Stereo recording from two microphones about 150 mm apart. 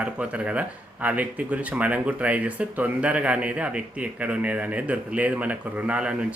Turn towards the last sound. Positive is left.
turn(degrees=-5)  # may be behind; listen again after turning